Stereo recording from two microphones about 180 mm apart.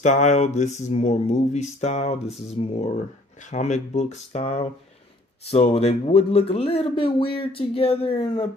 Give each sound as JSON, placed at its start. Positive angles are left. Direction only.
{"t": 0.0, "sound": "speech", "side_deg": 40}